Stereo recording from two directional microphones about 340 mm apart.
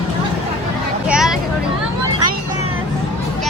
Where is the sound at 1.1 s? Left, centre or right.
Centre.